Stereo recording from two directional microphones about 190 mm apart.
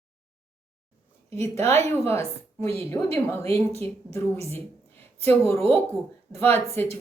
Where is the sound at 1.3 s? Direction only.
15° left (ahead or behind).